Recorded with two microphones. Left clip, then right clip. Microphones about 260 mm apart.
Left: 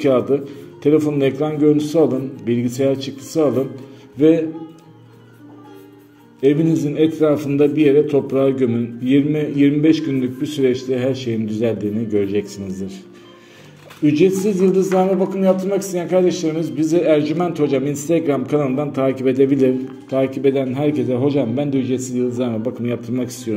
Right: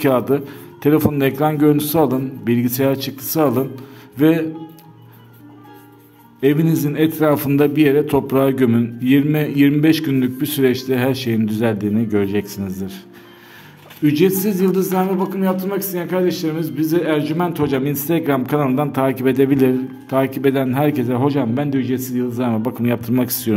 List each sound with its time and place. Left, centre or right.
0.0 s speech: right
6.4 s speech: right
14.0 s speech: right